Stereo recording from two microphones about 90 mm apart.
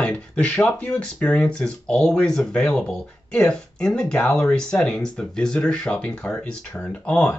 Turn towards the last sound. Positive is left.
turn(degrees=10)  # may be behind; listen again after turning